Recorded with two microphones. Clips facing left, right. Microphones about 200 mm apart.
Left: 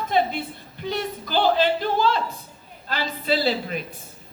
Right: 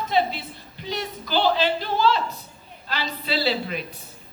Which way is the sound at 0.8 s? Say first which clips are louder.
Left 3 dB; 50° left (ahead or behind).